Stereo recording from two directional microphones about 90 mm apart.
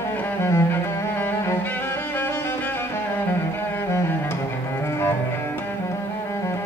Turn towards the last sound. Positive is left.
turn(degrees=30)  # may be behind; listen again after turning